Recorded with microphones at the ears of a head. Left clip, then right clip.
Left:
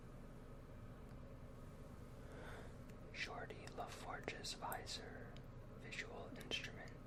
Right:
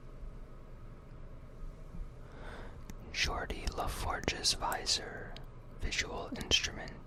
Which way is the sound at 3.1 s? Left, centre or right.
Right.